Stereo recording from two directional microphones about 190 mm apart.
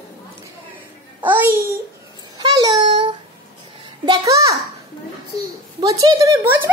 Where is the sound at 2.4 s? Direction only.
20° right (ahead or behind).